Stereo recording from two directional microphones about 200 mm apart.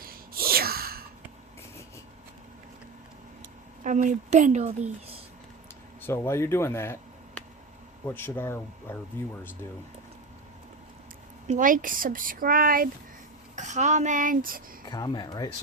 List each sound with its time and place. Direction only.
0.0 s gasp: 50° right (ahead or behind)
3.8 s a woman's voice: 40° right (ahead or behind)
6.0 s speech: 10° left (ahead or behind)
8.0 s speech: 10° left (ahead or behind)
11.4 s speech: 40° right (ahead or behind)
13.6 s a woman's voice: 35° right (ahead or behind)
14.8 s speech: 20° left (ahead or behind)